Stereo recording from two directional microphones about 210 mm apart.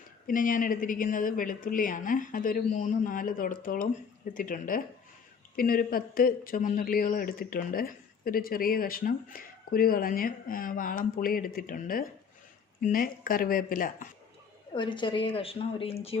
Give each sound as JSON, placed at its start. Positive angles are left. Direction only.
{"t": 0.3, "sound": "speech", "side_deg": 40}
{"t": 14.7, "sound": "a woman's voice", "side_deg": 20}